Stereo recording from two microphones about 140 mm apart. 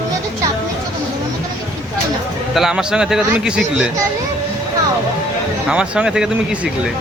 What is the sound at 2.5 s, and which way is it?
A man's voice, 5° right (ahead or behind).